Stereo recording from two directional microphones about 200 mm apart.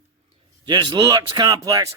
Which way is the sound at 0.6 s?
20° right (ahead or behind).